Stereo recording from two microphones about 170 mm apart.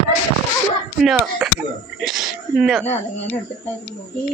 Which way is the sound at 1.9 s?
Centre (ahead or behind).